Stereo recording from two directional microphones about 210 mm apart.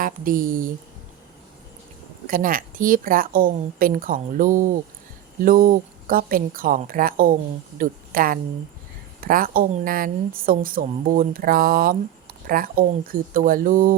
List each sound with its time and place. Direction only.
0.0 s a woman's voice: 40° right (ahead or behind)
2.2 s a woman's voice: 40° right (ahead or behind)